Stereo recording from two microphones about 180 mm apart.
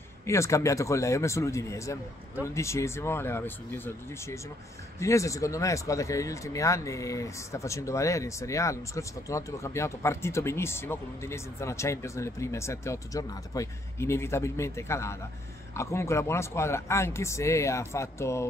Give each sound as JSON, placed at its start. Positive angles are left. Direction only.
{"t": 0.3, "sound": "speech", "side_deg": 15}